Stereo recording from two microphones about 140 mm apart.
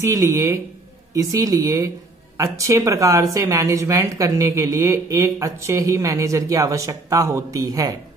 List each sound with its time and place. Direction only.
0.0 s speech: 20° right (ahead or behind)